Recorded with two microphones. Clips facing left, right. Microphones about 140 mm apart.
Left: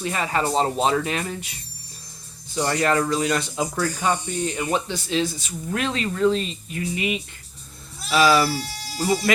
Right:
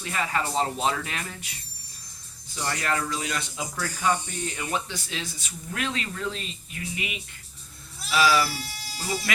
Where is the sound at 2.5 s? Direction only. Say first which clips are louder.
Left 8 dB; 35° left (ahead or behind).